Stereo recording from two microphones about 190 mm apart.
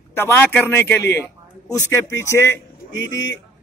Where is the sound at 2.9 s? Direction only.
75° left (ahead or behind).